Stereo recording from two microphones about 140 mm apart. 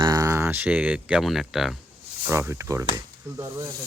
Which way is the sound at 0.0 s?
25° right (ahead or behind).